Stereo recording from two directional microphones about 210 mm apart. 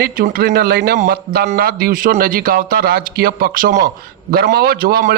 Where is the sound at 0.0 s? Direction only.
45° right (ahead or behind).